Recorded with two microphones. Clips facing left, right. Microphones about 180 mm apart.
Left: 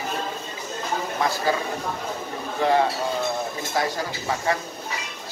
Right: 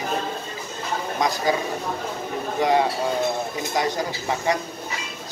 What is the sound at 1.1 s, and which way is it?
Speech, 15° right (ahead or behind).